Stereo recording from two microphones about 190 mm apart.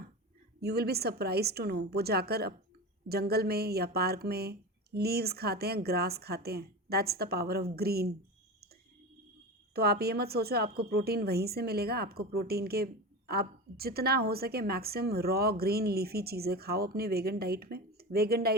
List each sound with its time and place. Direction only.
0.6 s a woman's voice: 55° right (ahead or behind)
9.7 s a woman's voice: 55° right (ahead or behind)